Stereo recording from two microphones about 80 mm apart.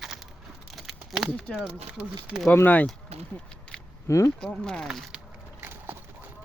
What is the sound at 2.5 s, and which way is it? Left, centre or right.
Speech, left.